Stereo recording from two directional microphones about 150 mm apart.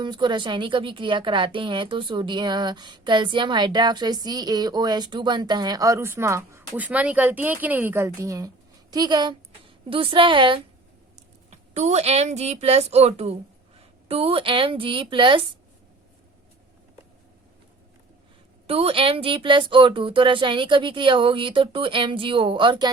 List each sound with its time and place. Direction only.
0.0 s a woman's voice: 30° right (ahead or behind)
11.5 s a woman's voice: 50° right (ahead or behind)
18.7 s speech: 40° right (ahead or behind)